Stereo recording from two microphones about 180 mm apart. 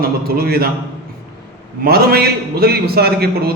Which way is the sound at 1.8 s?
60° right (ahead or behind).